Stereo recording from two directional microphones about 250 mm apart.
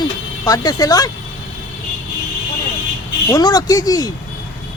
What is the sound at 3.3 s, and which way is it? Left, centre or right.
Speech, centre.